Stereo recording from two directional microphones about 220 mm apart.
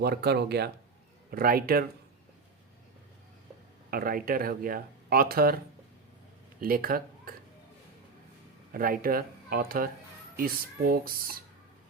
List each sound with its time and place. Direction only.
0.0 s speech: 45° right (ahead or behind)
3.9 s speech: 40° right (ahead or behind)
6.6 s speech: 40° right (ahead or behind)
8.7 s speech: 40° right (ahead or behind)